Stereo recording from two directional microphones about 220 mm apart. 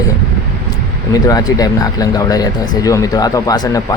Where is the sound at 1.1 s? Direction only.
15° left (ahead or behind).